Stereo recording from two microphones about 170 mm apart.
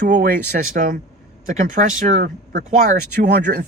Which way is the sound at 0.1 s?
50° right (ahead or behind).